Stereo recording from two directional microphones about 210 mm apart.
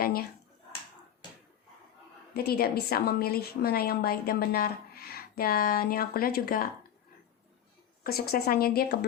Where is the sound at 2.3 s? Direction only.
45° left (ahead or behind).